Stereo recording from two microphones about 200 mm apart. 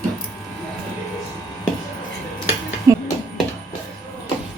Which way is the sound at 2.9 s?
15° right (ahead or behind).